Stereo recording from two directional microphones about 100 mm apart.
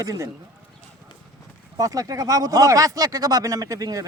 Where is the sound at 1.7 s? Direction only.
35° right (ahead or behind).